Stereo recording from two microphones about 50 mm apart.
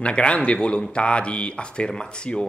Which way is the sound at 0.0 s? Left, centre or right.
Left.